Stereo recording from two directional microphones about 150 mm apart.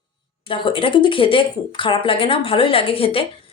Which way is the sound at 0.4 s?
35° left (ahead or behind).